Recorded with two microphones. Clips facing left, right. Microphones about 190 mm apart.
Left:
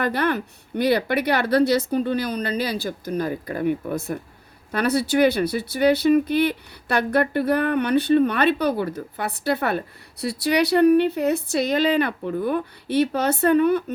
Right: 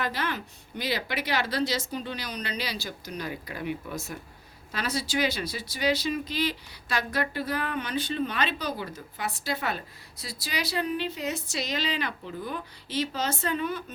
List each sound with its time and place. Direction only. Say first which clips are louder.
0.0 s speech: left 9 dB; 60° left (ahead or behind)